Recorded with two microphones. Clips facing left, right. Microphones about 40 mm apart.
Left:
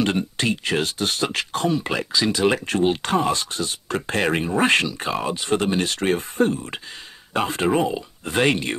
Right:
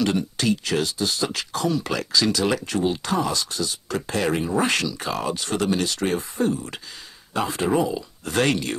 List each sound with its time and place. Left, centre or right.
0.0 s speech: left
2.6 s speech: left
8.3 s speech: left